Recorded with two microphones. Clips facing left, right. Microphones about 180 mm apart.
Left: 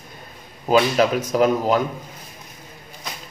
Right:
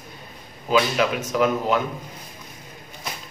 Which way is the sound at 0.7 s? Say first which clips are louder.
Left 4 dB; 40° left (ahead or behind).